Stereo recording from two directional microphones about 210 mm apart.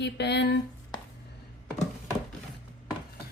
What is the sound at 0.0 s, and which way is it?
Speech, 55° left (ahead or behind).